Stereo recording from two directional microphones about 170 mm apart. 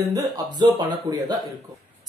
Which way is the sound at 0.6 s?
25° right (ahead or behind).